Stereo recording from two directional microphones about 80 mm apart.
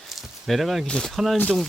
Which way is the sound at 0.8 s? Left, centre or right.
Centre.